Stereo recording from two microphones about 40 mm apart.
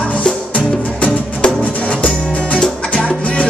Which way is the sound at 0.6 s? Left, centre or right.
Left.